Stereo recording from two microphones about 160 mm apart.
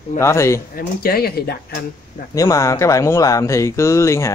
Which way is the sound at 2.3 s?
20° left (ahead or behind).